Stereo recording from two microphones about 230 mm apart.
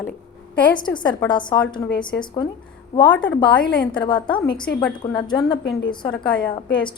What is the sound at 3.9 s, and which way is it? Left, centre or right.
A woman's voice, left.